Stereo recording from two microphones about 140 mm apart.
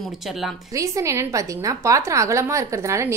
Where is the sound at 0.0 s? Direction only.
Centre (ahead or behind).